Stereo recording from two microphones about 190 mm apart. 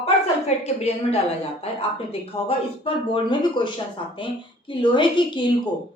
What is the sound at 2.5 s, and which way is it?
Speech, 25° left (ahead or behind).